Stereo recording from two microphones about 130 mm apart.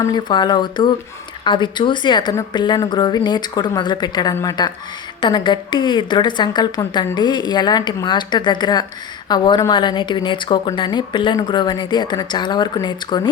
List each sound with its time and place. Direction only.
0.0 s a woman's voice: 35° left (ahead or behind)